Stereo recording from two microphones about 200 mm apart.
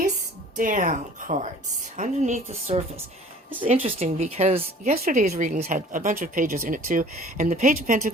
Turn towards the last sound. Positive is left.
turn(degrees=-40)  # may be behind; listen again after turning